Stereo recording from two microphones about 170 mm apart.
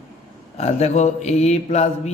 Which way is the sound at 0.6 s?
40° left (ahead or behind).